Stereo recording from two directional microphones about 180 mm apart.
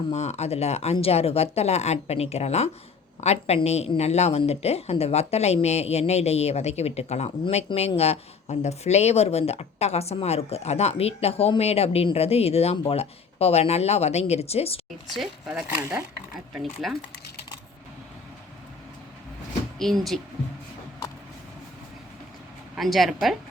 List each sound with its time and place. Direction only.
0.1 s speech: 35° left (ahead or behind)
15.1 s speech: centre (ahead or behind)
15.8 s speech: 15° right (ahead or behind)
16.6 s speech: centre (ahead or behind)
19.8 s speech: centre (ahead or behind)
22.7 s speech: centre (ahead or behind)